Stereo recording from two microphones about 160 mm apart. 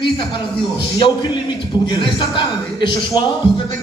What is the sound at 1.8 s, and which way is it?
A man's voice, 30° left (ahead or behind).